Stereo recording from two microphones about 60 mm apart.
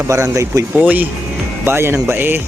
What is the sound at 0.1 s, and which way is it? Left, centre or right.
Speech, right.